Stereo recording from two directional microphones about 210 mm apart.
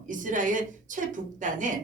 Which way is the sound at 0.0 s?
40° right (ahead or behind).